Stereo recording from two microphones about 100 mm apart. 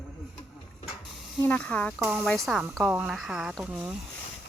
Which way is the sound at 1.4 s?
15° left (ahead or behind).